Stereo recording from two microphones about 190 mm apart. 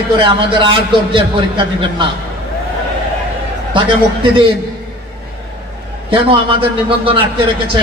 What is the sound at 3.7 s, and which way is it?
Speech, 25° right (ahead or behind).